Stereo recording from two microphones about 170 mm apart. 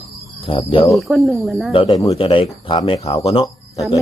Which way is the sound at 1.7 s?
25° left (ahead or behind).